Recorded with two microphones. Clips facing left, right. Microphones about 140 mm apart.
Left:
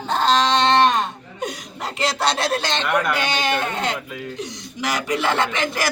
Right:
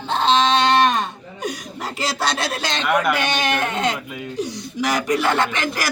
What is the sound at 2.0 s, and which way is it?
Speech, 25° left (ahead or behind).